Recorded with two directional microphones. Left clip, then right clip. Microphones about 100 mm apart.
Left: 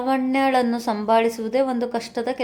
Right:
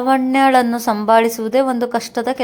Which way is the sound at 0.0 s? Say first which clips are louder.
Right 7 dB; 25° right (ahead or behind).